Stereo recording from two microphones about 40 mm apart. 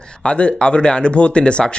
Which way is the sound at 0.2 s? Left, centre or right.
Left.